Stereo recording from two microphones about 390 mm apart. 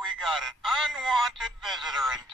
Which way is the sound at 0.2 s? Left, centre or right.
Centre.